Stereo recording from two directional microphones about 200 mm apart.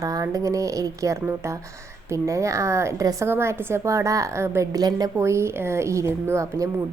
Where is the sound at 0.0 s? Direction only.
15° right (ahead or behind).